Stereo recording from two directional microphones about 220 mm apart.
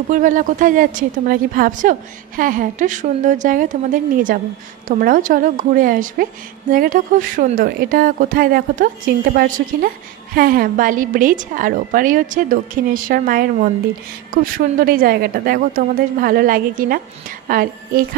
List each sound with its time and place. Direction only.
0.1 s a woman's voice: 35° right (ahead or behind)